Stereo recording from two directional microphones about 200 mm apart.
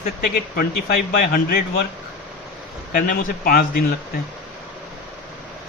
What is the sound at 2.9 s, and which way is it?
Speech, 45° left (ahead or behind).